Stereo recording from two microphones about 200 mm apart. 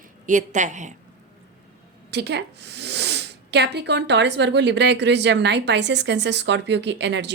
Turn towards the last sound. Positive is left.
turn(degrees=-60)  # may be behind; listen again after turning